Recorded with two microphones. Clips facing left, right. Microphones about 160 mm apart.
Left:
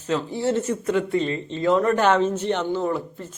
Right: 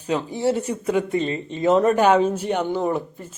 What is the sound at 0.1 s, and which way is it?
Speech, 15° right (ahead or behind).